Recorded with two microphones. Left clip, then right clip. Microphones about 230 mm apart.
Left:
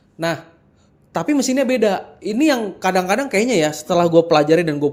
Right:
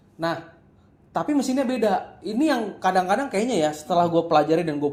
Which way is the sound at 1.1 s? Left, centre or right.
Left.